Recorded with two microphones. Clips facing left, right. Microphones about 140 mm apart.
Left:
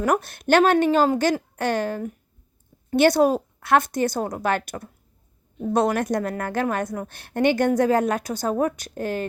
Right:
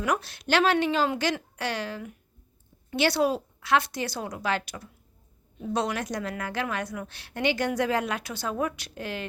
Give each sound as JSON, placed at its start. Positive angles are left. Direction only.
{"t": 0.0, "sound": "a woman's voice", "side_deg": 50}